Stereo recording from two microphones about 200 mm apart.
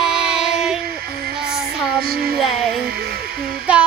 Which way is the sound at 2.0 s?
50° right (ahead or behind).